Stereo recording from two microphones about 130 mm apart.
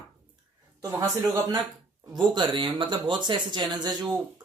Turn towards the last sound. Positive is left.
turn(degrees=-30)  # may be behind; listen again after turning